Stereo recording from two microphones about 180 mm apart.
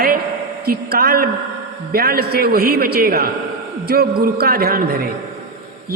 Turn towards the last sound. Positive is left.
turn(degrees=-55)  # may be behind; listen again after turning